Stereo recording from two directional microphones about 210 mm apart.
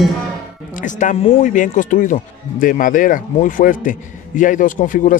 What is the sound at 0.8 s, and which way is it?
A man's voice, 35° left (ahead or behind).